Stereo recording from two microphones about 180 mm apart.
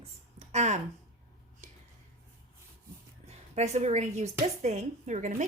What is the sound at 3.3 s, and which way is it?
A woman's voice, 40° right (ahead or behind).